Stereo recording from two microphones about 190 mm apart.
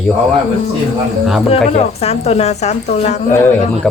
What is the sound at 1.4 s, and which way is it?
A woman's voice, 35° left (ahead or behind).